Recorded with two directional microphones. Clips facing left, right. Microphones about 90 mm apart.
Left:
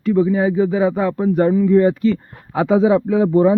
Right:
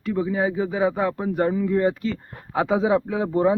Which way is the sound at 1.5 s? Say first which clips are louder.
Left 8 dB; 5° right (ahead or behind).